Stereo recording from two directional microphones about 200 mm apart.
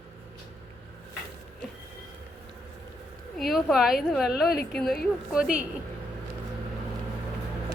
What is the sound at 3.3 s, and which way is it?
A woman's voice, centre (ahead or behind).